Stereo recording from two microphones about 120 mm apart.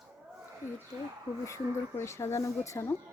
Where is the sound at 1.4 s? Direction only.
25° left (ahead or behind).